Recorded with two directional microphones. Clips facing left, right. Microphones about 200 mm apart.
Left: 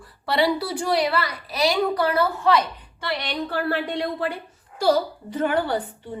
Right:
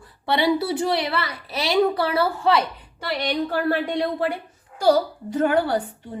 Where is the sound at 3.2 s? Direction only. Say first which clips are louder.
Right 6 dB; 45° right (ahead or behind).